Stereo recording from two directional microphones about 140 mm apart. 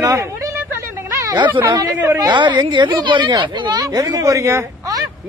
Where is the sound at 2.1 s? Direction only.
30° right (ahead or behind).